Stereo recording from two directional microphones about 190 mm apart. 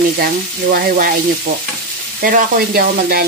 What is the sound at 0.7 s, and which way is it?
Sizzle, 55° right (ahead or behind).